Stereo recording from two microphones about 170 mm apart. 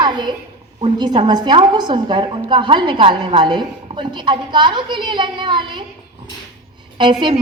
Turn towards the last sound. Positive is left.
turn(degrees=-25)  # may be behind; listen again after turning